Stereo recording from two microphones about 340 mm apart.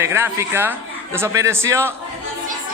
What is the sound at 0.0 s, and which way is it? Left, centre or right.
A man's voice, centre.